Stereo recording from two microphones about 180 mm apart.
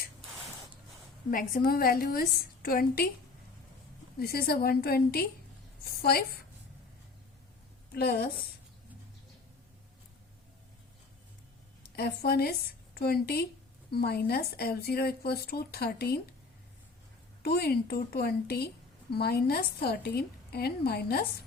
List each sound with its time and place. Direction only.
1.3 s speech: 50° left (ahead or behind)
4.2 s a woman's voice: 60° left (ahead or behind)
7.9 s speech: 60° left (ahead or behind)
11.9 s speech: 60° left (ahead or behind)
17.4 s speech: 60° left (ahead or behind)